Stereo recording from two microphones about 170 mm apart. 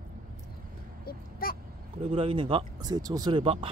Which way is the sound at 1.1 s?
60° left (ahead or behind).